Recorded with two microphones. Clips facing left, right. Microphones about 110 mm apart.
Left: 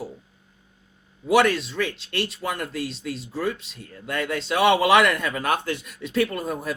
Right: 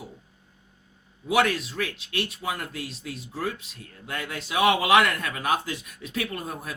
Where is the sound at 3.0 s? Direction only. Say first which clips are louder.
Left 4 dB; 90° left.